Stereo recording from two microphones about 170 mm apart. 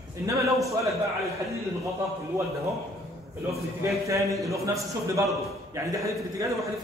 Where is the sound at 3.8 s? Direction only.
20° right (ahead or behind).